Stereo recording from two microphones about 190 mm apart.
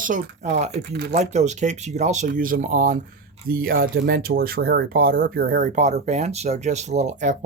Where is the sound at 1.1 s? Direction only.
35° right (ahead or behind).